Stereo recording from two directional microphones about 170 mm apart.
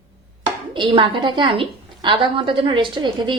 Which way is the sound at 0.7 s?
30° right (ahead or behind).